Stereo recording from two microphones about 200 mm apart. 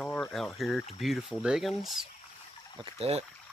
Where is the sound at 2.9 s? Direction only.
30° right (ahead or behind).